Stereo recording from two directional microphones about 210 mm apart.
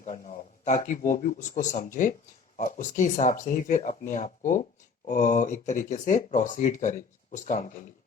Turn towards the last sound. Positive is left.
turn(degrees=35)  # may be behind; listen again after turning